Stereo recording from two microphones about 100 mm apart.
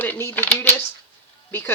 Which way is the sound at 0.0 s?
20° left (ahead or behind).